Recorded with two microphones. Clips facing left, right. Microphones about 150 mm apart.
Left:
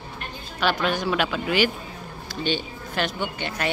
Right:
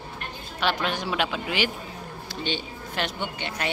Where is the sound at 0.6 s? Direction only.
25° right (ahead or behind).